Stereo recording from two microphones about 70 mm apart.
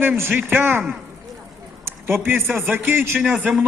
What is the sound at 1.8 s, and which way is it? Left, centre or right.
A man's voice, right.